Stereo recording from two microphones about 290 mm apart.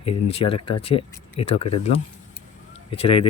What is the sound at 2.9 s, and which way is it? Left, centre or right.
Speech, centre.